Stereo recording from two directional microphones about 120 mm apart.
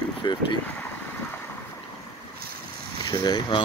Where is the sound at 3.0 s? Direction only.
35° left (ahead or behind).